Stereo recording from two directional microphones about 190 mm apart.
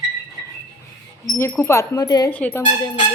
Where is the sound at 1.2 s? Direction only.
15° left (ahead or behind).